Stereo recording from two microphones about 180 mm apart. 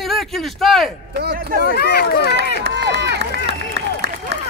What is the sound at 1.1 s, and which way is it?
Speech, 60° right (ahead or behind).